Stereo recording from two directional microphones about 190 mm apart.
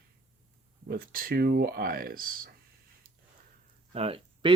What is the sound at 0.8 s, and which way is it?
Speech, 50° right (ahead or behind).